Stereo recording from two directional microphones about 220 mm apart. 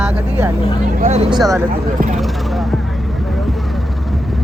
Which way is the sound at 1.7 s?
35° right (ahead or behind).